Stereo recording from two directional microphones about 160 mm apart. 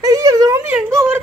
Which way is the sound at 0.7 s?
10° right (ahead or behind).